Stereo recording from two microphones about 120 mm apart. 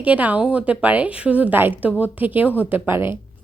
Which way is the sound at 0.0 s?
10° right (ahead or behind).